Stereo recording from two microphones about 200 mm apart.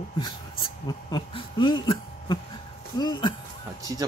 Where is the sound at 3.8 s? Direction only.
15° right (ahead or behind).